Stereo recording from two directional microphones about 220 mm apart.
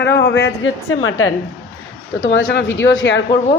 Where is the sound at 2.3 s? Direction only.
60° left (ahead or behind).